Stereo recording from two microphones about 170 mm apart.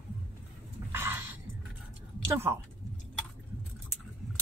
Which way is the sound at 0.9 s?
15° right (ahead or behind).